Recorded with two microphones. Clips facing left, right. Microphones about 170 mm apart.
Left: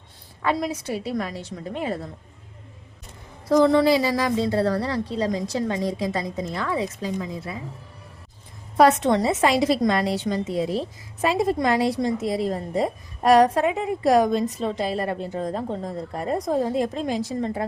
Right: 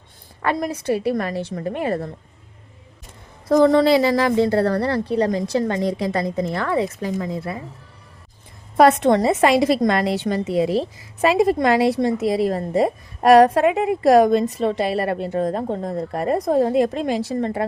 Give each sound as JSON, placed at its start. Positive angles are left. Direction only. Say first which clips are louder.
{"t": 0.4, "sound": "a woman's voice", "louder": "right 3 dB", "side_deg": -55}
{"t": 3.5, "sound": "a woman's voice", "louder": "right 3 dB", "side_deg": -50}
{"t": 8.8, "sound": "a woman's voice", "louder": "right 3 dB", "side_deg": -55}